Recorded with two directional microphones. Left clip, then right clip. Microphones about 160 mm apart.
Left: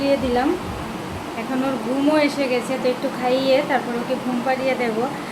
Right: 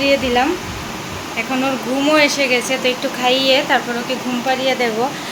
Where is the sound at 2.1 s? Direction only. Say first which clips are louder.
Right 6 dB; centre (ahead or behind).